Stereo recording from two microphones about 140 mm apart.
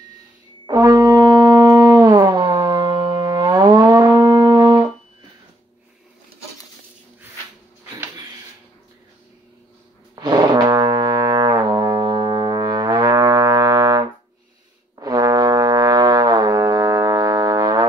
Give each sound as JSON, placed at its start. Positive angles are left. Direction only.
{"t": 0.7, "sound": "brass instrument", "side_deg": -30}
{"t": 10.1, "sound": "brass instrument", "side_deg": -30}